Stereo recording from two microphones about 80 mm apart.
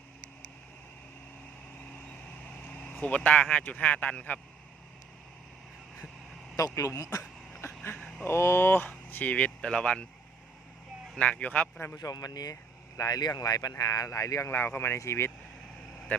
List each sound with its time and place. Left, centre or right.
2.6 s vehicle: centre
3.0 s speech: centre
6.7 s speech: left; by 10.1 s centre
11.2 s speech: centre
11.9 s speech: left
14.5 s speech: left